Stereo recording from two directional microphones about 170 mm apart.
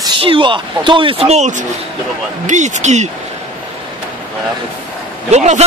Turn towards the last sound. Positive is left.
turn(degrees=-45)  # may be behind; listen again after turning